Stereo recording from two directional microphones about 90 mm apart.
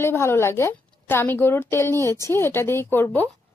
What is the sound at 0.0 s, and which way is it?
A woman's voice, 30° left (ahead or behind).